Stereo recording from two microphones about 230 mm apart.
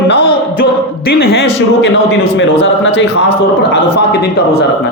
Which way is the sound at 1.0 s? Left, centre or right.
Left.